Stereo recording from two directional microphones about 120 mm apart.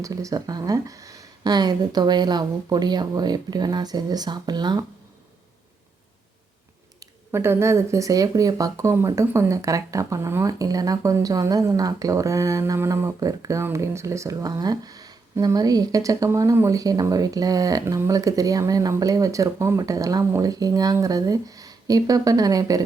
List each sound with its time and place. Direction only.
0.0 s speech: 30° right (ahead or behind)
7.3 s speech: 20° right (ahead or behind)